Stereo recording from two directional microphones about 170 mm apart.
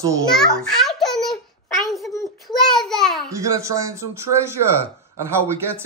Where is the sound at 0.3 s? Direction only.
Centre (ahead or behind).